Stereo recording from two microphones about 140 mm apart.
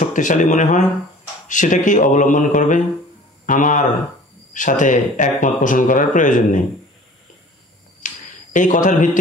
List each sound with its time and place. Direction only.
0.0 s speech: 65° left (ahead or behind)
8.0 s a sound: 65° left (ahead or behind)
8.5 s speech: 65° left (ahead or behind)